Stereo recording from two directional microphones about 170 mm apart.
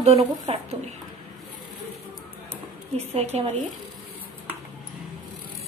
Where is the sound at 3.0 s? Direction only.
40° right (ahead or behind).